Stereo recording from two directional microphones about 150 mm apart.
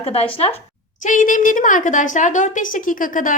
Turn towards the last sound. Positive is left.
turn(degrees=60)  # may be behind; listen again after turning